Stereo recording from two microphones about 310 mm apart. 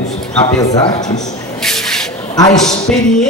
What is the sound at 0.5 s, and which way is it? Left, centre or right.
Speech, centre.